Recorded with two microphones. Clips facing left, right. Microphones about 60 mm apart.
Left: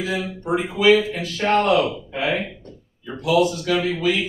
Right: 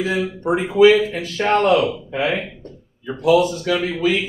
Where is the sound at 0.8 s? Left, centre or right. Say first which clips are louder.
Right 4 dB; right.